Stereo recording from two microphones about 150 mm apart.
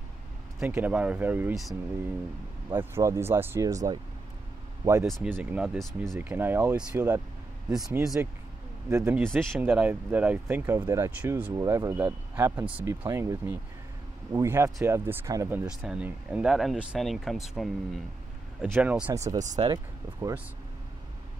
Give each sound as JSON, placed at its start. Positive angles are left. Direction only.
{"t": 0.6, "sound": "speech", "side_deg": -10}
{"t": 2.7, "sound": "speech", "side_deg": -15}
{"t": 5.2, "sound": "speech", "side_deg": -10}
{"t": 6.1, "sound": "speech", "side_deg": -15}
{"t": 8.8, "sound": "speech", "side_deg": -20}
{"t": 9.3, "sound": "speech", "side_deg": 5}
{"t": 9.6, "sound": "speech", "side_deg": -10}
{"t": 15.6, "sound": "speech", "side_deg": -5}
{"t": 19.2, "sound": "speech", "side_deg": -55}
{"t": 19.7, "sound": "speech", "side_deg": -20}